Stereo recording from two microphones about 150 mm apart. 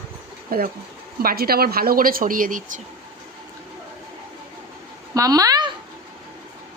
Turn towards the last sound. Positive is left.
turn(degrees=-25)  # may be behind; listen again after turning